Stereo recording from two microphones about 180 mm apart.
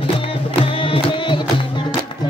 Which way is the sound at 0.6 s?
30° left (ahead or behind).